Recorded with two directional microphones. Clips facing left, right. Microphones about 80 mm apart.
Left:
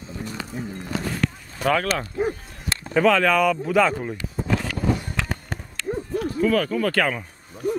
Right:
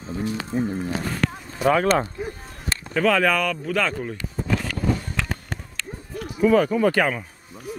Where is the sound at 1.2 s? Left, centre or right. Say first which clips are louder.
Right 2 dB; right.